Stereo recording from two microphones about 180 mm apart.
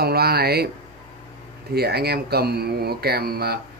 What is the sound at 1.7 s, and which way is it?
Speech, 60° right (ahead or behind).